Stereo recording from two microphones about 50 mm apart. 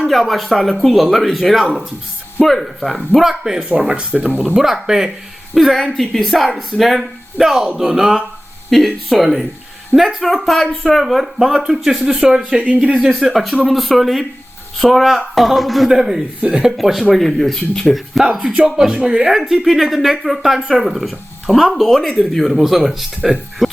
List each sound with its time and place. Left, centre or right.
0.0 s speech: centre
5.5 s speech: centre
11.0 s speech: centre; by 12.9 s right
13.2 s speech: centre
16.7 s speech: centre
17.9 s speech: centre